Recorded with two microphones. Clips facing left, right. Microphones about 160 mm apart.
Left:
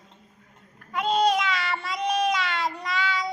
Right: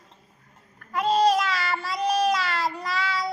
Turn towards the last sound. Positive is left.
turn(degrees=-5)  # may be behind; listen again after turning